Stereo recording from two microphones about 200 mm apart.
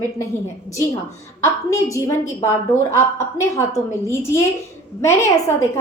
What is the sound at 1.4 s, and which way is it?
A woman's voice, 15° left (ahead or behind).